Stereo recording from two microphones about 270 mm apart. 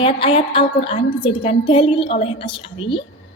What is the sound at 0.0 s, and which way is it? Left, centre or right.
A woman's voice, centre.